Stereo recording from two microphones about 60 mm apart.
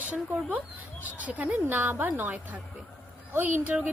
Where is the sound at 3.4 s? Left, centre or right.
Right.